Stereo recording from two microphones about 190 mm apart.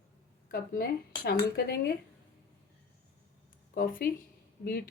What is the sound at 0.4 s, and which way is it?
Speech, 50° left (ahead or behind).